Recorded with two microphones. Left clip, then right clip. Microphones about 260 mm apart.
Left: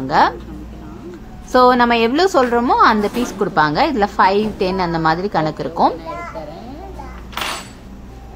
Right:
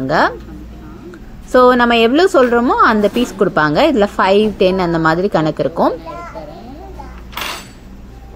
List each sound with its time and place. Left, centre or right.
0.0 s speech: centre
1.5 s a woman's voice: centre